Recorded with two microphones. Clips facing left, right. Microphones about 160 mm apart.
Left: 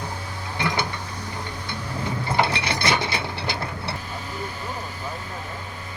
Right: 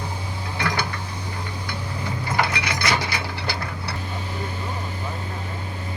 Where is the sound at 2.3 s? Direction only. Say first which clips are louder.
Left 1 dB; 25° left (ahead or behind).